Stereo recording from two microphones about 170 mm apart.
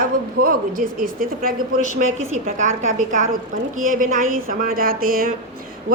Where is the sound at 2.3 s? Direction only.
45° right (ahead or behind).